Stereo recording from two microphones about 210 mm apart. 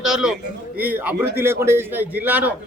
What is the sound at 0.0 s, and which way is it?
A man's voice, centre (ahead or behind).